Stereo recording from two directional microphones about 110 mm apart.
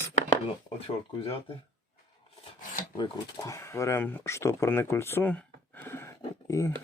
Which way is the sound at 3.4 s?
25° left (ahead or behind).